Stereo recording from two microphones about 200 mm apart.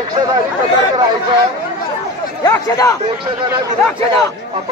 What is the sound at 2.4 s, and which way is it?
Speech, 15° left (ahead or behind).